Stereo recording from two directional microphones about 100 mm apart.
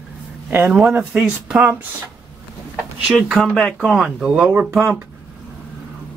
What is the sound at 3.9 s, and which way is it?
Speech, 5° right (ahead or behind).